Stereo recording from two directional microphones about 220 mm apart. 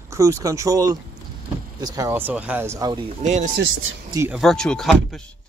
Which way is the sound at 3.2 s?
35° right (ahead or behind).